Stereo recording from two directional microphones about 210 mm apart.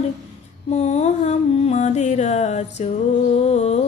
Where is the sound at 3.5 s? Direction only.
30° left (ahead or behind).